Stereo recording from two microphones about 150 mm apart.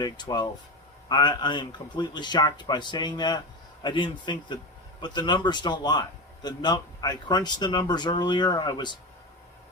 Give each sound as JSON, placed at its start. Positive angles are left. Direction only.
{"t": 0.0, "sound": "a man's voice", "side_deg": 30}